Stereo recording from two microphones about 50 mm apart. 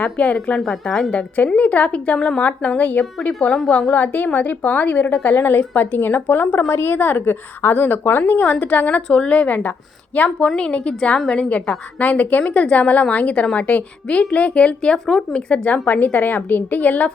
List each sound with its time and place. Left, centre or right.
0.0 s a woman's voice: left; by 1.0 s centre
1.5 s a woman's voice: left
3.9 s a woman's voice: left
6.7 s a woman's voice: left
14.9 s speech: centre
15.3 s a woman's voice: left
15.9 s a woman's voice: left